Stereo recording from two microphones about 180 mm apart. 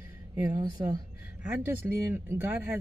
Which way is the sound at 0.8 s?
30° right (ahead or behind).